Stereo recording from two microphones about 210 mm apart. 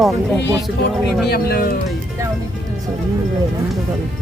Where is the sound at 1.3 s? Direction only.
45° left (ahead or behind).